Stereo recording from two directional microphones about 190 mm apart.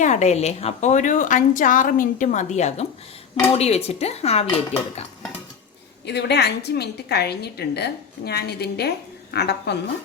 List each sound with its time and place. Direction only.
0.0 s a woman's voice: 40° left (ahead or behind)
6.1 s a woman's voice: 60° left (ahead or behind)